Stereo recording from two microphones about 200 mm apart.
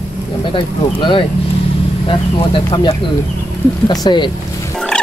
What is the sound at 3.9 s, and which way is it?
Speech, 20° left (ahead or behind).